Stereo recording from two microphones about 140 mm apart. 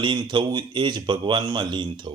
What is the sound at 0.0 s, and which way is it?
A man's voice, 35° right (ahead or behind).